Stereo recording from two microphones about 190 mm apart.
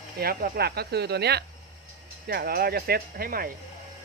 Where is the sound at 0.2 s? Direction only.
50° right (ahead or behind).